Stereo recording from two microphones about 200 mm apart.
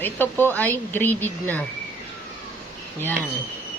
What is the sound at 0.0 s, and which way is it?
Speech, 10° left (ahead or behind).